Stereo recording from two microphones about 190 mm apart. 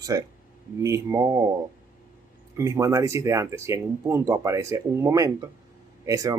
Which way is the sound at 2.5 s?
15° right (ahead or behind).